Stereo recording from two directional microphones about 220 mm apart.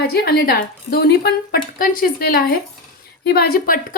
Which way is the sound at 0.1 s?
45° left (ahead or behind).